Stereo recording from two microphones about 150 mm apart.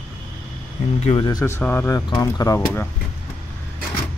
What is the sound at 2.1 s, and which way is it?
Speech, 35° left (ahead or behind).